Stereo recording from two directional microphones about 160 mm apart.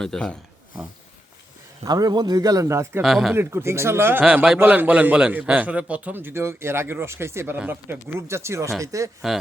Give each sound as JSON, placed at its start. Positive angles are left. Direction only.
{"t": 0.0, "sound": "speech", "side_deg": 5}
{"t": 1.8, "sound": "speech", "side_deg": -25}
{"t": 3.0, "sound": "speech", "side_deg": 0}
{"t": 3.3, "sound": "a man's voice", "side_deg": -15}